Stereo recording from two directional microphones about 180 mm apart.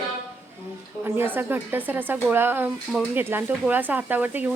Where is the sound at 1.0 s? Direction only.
10° right (ahead or behind).